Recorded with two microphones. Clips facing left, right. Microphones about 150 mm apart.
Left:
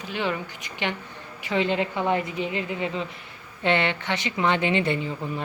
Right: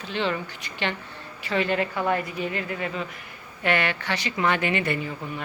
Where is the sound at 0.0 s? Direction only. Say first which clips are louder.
Right 1 dB; 10° left (ahead or behind).